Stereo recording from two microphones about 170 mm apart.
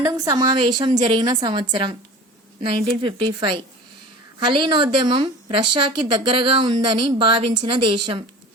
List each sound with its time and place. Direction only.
0.0 s a woman's voice: 20° right (ahead or behind)